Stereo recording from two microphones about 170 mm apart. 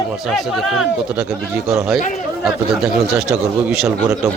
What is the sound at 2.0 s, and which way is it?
Speech, 50° left (ahead or behind).